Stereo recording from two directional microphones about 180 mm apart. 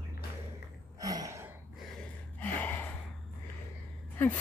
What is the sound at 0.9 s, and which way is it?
Gasp, 20° right (ahead or behind).